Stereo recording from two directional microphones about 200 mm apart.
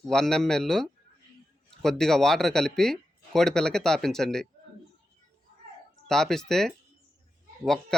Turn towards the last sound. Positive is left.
turn(degrees=0)  # may be behind; listen again after turning